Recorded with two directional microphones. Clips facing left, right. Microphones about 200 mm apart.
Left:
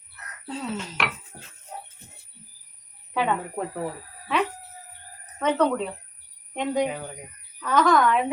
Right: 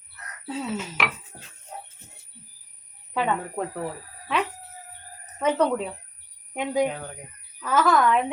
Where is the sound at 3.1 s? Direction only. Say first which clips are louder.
Even; centre (ahead or behind).